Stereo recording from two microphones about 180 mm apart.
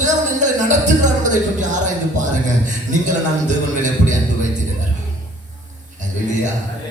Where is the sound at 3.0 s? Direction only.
45° right (ahead or behind).